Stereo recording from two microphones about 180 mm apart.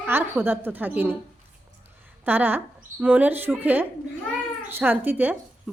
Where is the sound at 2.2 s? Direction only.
10° right (ahead or behind).